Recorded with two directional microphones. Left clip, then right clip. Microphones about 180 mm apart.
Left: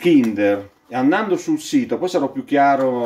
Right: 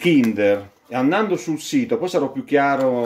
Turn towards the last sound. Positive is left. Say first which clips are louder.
# left 2 dB
turn(degrees=-25)  # may be behind; listen again after turning